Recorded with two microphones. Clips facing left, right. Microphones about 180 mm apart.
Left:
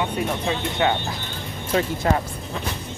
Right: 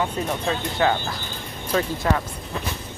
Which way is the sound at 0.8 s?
20° left (ahead or behind).